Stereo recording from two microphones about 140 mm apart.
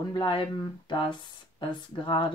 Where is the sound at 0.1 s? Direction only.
35° left (ahead or behind).